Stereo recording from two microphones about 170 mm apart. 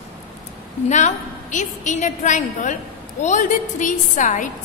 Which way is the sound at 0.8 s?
45° left (ahead or behind).